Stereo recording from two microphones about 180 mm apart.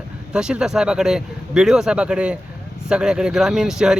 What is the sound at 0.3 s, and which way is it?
Speech, 5° right (ahead or behind).